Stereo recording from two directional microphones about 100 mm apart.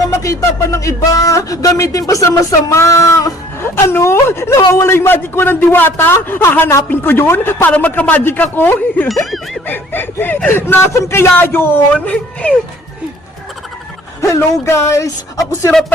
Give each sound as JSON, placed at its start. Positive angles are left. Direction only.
{"t": 0.2, "sound": "speech", "side_deg": 30}
{"t": 14.2, "sound": "speech", "side_deg": 30}